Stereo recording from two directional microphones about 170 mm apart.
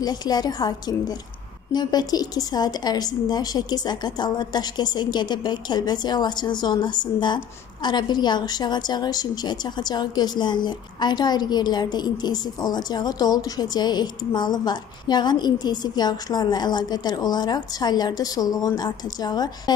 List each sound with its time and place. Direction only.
0.0 s a woman's voice: 25° left (ahead or behind)